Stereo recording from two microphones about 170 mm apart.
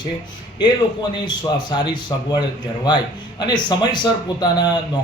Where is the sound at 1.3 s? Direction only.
25° left (ahead or behind).